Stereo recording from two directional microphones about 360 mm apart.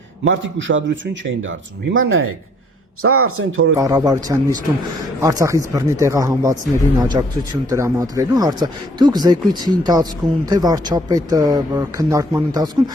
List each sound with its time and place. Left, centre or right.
0.3 s speech: right
3.8 s speech: centre